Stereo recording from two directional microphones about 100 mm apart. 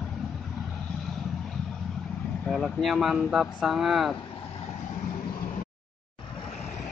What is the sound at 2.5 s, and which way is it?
Speech, centre (ahead or behind).